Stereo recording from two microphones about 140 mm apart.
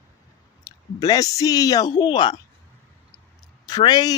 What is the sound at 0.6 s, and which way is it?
Speech, 25° left (ahead or behind).